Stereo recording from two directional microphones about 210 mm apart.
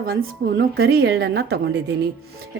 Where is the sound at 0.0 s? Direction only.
45° right (ahead or behind).